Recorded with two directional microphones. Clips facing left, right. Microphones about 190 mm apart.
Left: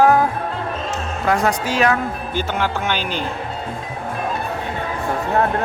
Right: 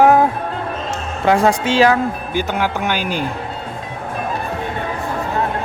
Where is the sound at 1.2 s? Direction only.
30° right (ahead or behind).